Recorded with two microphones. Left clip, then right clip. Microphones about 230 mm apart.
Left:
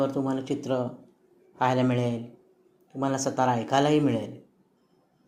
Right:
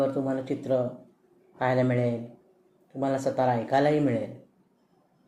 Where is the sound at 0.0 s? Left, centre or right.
Left.